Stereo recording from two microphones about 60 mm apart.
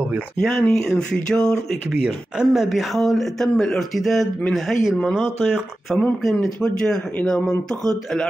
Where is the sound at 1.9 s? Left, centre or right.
Centre.